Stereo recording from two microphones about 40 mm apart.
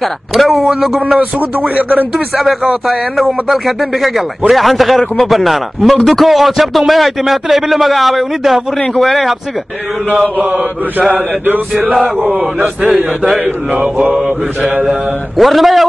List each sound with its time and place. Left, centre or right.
0.3 s speech: centre
1.1 s speech: right
2.1 s speech: centre
11.1 s chant: right
14.6 s speech: right
15.3 s speech: centre